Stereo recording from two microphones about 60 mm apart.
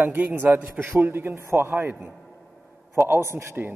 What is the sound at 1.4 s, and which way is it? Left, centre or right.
Speech, right.